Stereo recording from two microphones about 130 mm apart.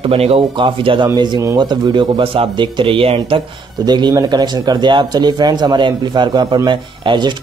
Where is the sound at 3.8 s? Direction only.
35° right (ahead or behind).